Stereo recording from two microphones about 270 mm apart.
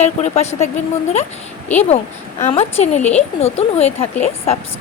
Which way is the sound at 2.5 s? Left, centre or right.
Left.